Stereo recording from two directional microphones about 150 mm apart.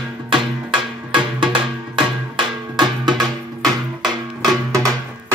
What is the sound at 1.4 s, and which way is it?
Music, 35° right (ahead or behind).